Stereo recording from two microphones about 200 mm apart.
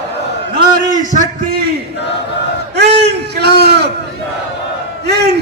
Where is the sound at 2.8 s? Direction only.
60° right (ahead or behind).